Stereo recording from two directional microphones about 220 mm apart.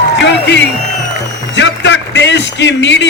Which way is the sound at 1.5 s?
55° left (ahead or behind).